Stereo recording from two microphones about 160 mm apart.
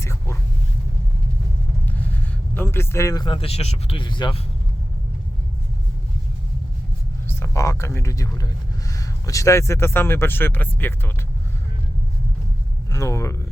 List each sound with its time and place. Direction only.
0.0 s vehicle: 15° left (ahead or behind)
1.9 s speech: 10° left (ahead or behind); by 4.4 s 30° left (ahead or behind)
7.3 s speech: 15° left (ahead or behind)
12.9 s speech: 20° left (ahead or behind)